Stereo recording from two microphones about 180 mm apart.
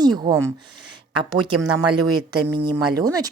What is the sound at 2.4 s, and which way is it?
Speech, 20° right (ahead or behind).